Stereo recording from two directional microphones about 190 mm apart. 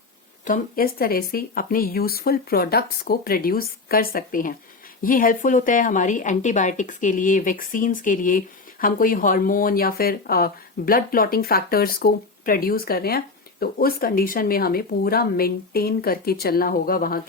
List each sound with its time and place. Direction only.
0.4 s a woman's voice: 45° left (ahead or behind)